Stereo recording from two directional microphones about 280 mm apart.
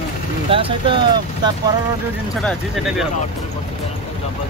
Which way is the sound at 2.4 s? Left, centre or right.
Centre.